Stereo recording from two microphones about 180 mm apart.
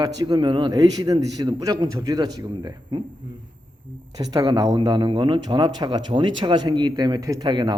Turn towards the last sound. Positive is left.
turn(degrees=-25)  # may be behind; listen again after turning